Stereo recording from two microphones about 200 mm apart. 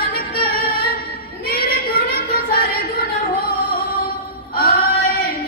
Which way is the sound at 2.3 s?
45° left (ahead or behind).